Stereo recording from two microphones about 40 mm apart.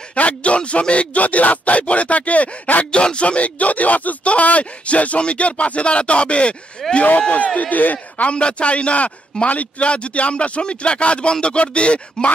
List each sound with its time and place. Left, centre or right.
0.1 s speech: left
6.8 s speech: centre
7.2 s speech: left
8.3 s speech: left